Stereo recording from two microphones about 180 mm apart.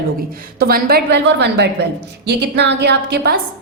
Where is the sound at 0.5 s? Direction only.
55° right (ahead or behind).